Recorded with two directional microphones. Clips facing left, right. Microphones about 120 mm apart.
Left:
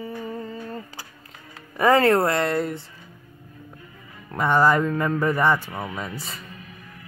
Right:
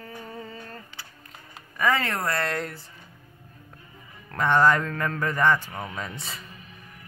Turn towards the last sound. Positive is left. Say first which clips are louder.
# left 3 dB
turn(degrees=0)  # may be behind; listen again after turning